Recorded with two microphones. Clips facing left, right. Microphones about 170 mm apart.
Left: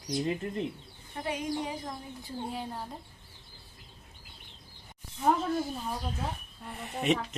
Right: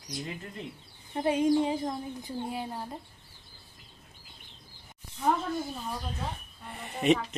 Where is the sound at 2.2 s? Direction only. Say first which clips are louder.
Left 1 dB; 5° right (ahead or behind).